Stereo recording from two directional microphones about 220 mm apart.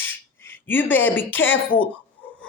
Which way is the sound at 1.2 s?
60° left (ahead or behind).